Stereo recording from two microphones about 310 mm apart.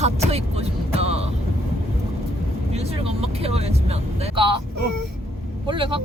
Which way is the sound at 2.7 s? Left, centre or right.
Centre.